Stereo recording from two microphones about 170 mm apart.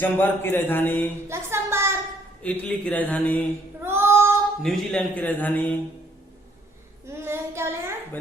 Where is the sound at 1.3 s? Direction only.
15° right (ahead or behind).